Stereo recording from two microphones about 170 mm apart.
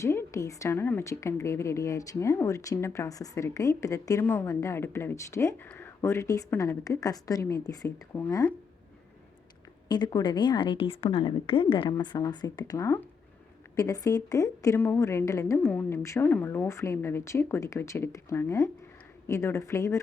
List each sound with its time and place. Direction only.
0.0 s a woman's voice: 15° left (ahead or behind)
9.9 s a woman's voice: 25° left (ahead or behind)